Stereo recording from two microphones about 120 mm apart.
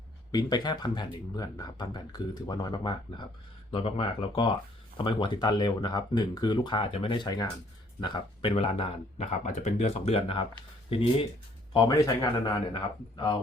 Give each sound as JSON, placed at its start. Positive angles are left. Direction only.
{"t": 0.3, "sound": "speech", "side_deg": 35}
{"t": 8.0, "sound": "speech", "side_deg": 45}
{"t": 11.7, "sound": "speech", "side_deg": 30}